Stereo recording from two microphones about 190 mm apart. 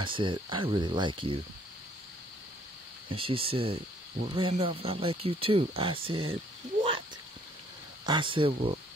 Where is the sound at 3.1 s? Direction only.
30° right (ahead or behind).